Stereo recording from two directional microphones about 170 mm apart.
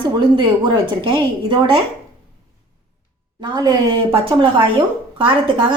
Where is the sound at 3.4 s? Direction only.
25° right (ahead or behind).